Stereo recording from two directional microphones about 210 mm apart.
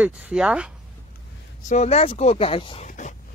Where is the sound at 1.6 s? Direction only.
30° left (ahead or behind).